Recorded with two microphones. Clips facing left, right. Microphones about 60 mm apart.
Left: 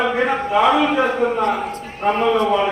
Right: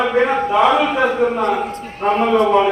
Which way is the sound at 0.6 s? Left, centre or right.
Right.